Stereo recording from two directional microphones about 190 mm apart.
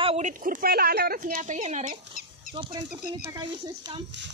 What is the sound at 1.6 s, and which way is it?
Speech, 35° right (ahead or behind).